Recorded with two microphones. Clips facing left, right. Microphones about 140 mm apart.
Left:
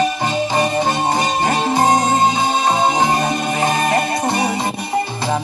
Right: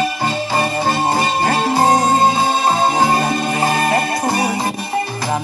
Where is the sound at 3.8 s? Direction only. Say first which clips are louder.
Even; 20° left (ahead or behind).